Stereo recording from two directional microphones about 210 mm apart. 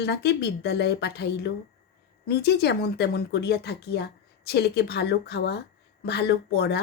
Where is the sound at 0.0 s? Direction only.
50° left (ahead or behind).